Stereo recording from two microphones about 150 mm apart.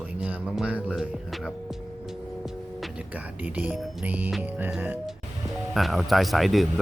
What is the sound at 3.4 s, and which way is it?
Speech, 10° right (ahead or behind).